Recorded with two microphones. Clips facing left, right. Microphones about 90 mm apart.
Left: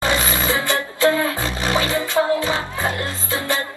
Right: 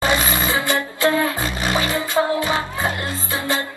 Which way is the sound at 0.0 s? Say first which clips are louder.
Right 1 dB; 20° right (ahead or behind).